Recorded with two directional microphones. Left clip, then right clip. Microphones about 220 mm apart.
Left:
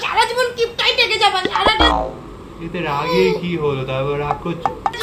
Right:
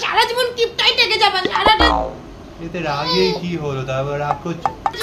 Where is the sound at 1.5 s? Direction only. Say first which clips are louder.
Right 1 dB; 15° right (ahead or behind).